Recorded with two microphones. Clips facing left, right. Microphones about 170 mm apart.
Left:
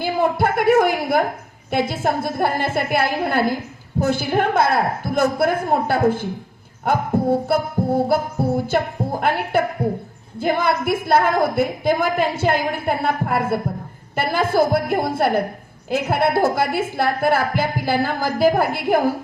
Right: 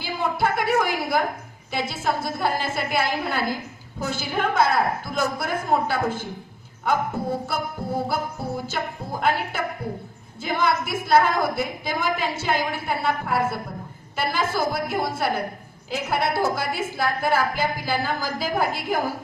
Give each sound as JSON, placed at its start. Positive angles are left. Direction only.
{"t": 0.0, "sound": "a woman's voice", "side_deg": 55}
{"t": 8.0, "sound": "a sound", "side_deg": 55}
{"t": 9.2, "sound": "a woman's voice", "side_deg": 55}